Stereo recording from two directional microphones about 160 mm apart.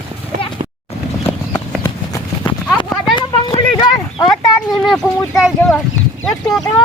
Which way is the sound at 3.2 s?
25° left (ahead or behind).